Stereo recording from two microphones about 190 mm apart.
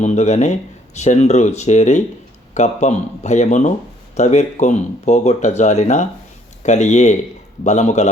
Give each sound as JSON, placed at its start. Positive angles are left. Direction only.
{"t": 0.0, "sound": "speech", "side_deg": 35}